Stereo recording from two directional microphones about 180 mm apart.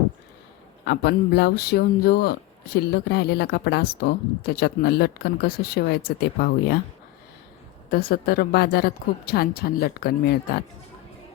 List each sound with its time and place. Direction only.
0.9 s a woman's voice: 65° left (ahead or behind)
7.9 s a woman's voice: 60° left (ahead or behind)